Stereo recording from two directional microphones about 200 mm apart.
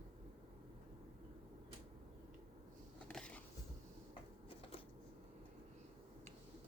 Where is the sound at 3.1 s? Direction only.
5° left (ahead or behind).